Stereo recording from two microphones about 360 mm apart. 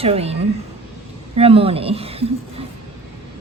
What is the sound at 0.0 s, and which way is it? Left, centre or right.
A woman's voice, centre.